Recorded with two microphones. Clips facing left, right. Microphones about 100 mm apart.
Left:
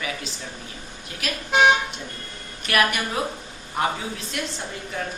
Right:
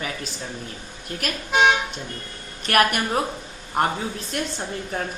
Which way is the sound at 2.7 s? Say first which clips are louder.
Right 3 dB; 50° right (ahead or behind).